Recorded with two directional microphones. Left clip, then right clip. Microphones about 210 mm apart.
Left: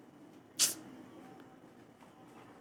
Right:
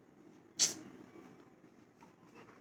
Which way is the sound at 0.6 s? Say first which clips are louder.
Left 1 dB; 5° left (ahead or behind).